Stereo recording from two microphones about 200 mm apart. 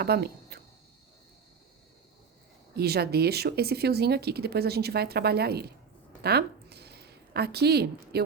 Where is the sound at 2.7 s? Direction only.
50° right (ahead or behind).